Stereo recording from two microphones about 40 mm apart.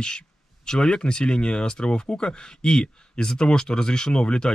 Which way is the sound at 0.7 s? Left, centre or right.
Left.